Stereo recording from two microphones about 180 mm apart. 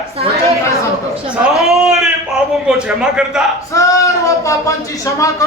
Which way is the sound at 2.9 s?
5° right (ahead or behind).